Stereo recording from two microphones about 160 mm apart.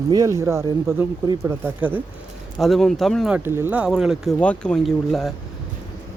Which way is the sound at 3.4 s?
15° right (ahead or behind).